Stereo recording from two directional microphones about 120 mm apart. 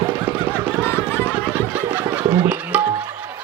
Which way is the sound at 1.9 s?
15° right (ahead or behind).